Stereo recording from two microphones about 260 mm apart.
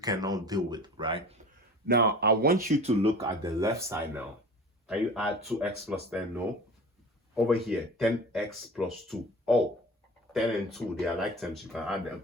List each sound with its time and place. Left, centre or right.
0.0 s speech: centre
1.9 s speech: right
3.4 s speech: centre